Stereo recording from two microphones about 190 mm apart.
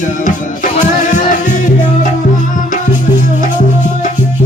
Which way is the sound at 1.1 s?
45° left (ahead or behind).